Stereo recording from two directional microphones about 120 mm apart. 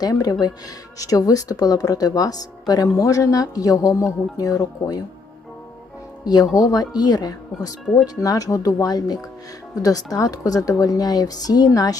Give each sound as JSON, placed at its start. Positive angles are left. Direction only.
{"t": 0.0, "sound": "a woman's voice", "side_deg": 30}
{"t": 6.2, "sound": "a woman's voice", "side_deg": 35}